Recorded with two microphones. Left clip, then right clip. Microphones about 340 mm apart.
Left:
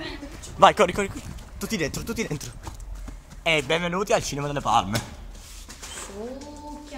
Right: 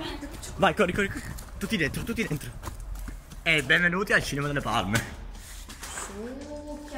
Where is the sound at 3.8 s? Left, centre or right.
Centre.